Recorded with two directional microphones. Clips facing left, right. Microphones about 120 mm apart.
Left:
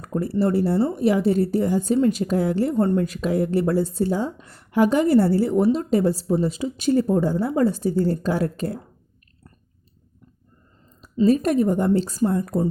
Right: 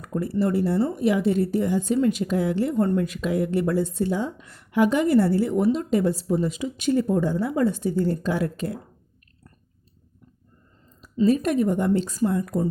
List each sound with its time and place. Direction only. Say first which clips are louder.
0.0 s a woman's voice: left 2 dB; 35° left (ahead or behind)
11.0 s a woman's voice: left 2 dB; 35° left (ahead or behind)